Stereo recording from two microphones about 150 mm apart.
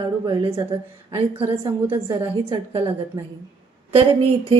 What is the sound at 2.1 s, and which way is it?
Speech, 30° right (ahead or behind).